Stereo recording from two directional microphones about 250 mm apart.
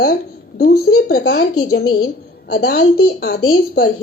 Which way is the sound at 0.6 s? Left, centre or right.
Left.